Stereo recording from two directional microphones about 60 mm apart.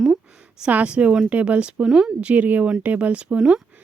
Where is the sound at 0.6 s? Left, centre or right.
Right.